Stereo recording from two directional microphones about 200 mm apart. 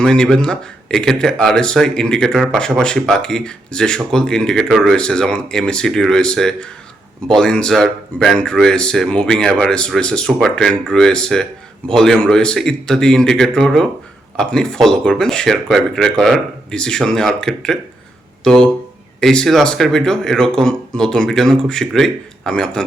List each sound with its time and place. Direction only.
0.0 s speech: 5° left (ahead or behind)